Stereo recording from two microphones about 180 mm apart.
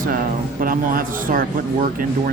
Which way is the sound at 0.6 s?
50° right (ahead or behind).